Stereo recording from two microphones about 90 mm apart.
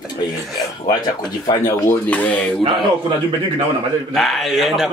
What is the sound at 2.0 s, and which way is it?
Speech, 20° left (ahead or behind).